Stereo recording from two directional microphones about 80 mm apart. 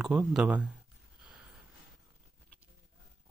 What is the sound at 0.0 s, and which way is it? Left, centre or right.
Speech, centre.